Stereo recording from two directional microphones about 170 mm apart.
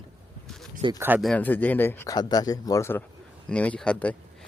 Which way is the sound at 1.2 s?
5° left (ahead or behind).